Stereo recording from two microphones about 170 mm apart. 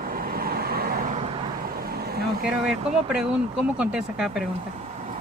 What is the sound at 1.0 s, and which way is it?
Vehicle, 40° right (ahead or behind).